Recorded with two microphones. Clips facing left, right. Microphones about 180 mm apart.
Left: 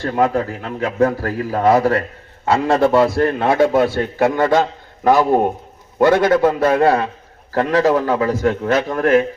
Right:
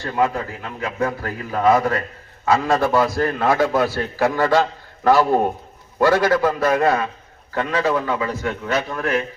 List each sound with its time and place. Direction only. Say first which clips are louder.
0.1 s a man's voice: left 3 dB; 45° left (ahead or behind)